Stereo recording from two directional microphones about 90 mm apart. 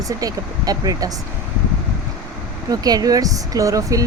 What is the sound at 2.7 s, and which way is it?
Speech, 45° right (ahead or behind).